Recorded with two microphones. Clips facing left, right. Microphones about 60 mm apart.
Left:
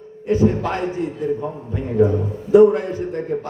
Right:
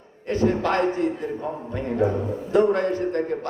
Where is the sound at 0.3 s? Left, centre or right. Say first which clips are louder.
Left 6 dB; centre.